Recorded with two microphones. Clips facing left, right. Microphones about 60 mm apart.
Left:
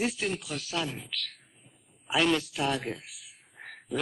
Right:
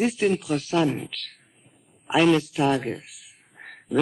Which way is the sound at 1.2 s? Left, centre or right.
Right.